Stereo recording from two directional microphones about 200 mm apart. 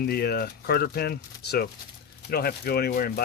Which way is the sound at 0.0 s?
50° left (ahead or behind).